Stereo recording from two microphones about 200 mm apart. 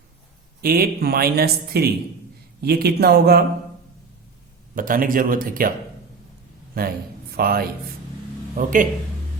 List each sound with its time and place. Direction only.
0.6 s speech: 50° right (ahead or behind)
4.7 s speech: 45° right (ahead or behind)
6.7 s a man's voice: 50° right (ahead or behind)